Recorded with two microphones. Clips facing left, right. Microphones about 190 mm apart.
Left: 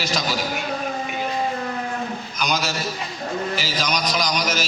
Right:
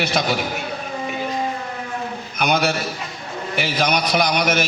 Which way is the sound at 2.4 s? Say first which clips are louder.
Right 5 dB; 60° right (ahead or behind).